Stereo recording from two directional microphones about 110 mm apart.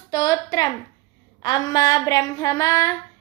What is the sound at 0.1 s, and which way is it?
Female singing, 35° left (ahead or behind).